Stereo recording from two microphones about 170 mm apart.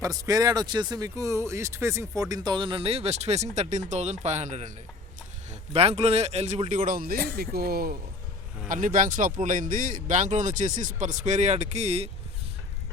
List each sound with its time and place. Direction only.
0.0 s speech: 20° right (ahead or behind); by 4.7 s 40° right (ahead or behind)
5.7 s speech: 35° right (ahead or behind); by 7.9 s 65° right (ahead or behind)
8.6 s speech: 50° right (ahead or behind)